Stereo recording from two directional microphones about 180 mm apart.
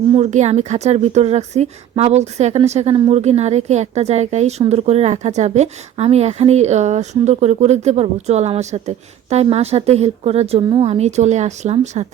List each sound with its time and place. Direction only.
0.1 s a woman's voice: 40° right (ahead or behind)